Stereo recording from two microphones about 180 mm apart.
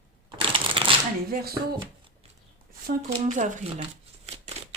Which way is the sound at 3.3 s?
45° right (ahead or behind).